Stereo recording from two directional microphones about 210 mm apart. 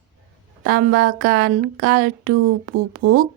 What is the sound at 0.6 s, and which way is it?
Speech, 50° right (ahead or behind).